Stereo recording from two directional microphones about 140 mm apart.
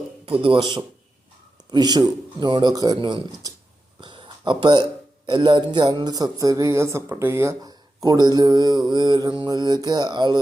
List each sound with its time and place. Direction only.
0.4 s a man's voice: 35° right (ahead or behind)